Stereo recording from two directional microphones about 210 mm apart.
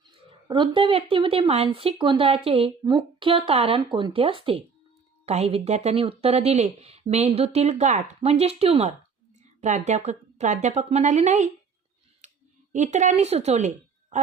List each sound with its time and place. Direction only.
0.0 s speech: 20° right (ahead or behind)
12.2 s clicking: 35° right (ahead or behind)
12.7 s a woman's voice: 35° right (ahead or behind)